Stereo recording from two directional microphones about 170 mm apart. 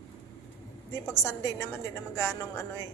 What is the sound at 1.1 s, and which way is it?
A woman's voice, 20° left (ahead or behind).